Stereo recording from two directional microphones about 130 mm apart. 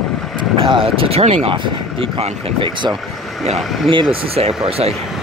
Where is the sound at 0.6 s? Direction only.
45° right (ahead or behind).